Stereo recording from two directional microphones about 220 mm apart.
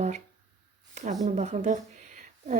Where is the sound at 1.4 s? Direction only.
30° right (ahead or behind).